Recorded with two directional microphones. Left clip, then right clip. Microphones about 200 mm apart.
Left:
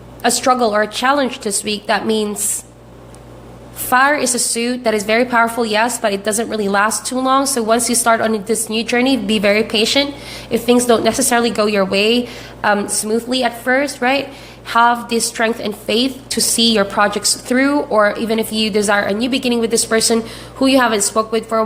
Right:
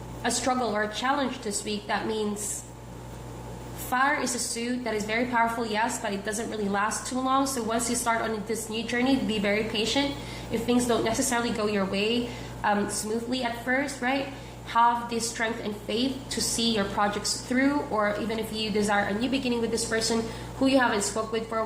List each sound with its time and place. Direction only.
0.2 s a woman's voice: 50° left (ahead or behind)
3.8 s a woman's voice: 50° left (ahead or behind)